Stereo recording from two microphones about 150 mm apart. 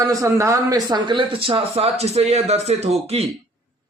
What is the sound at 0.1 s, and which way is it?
Speech, 20° right (ahead or behind).